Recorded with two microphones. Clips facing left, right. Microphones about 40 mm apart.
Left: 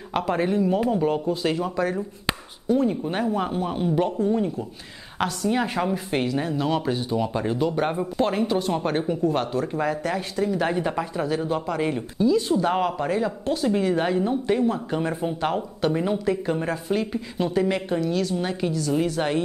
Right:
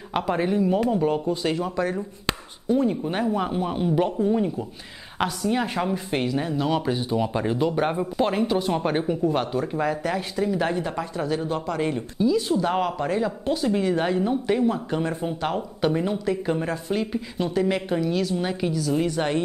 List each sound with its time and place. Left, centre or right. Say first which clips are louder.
0.1 s speech: even; centre
10.7 s speech: left 2 dB; centre